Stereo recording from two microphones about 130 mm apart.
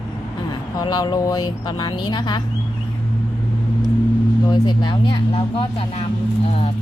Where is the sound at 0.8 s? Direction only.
30° left (ahead or behind).